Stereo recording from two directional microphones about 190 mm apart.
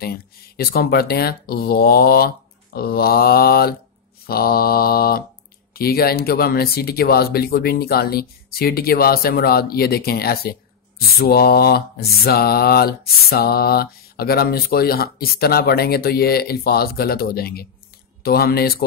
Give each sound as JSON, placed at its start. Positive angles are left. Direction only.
{"t": 0.0, "sound": "mantra", "side_deg": 55}